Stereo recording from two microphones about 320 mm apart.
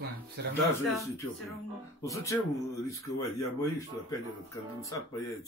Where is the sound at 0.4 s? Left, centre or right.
Right.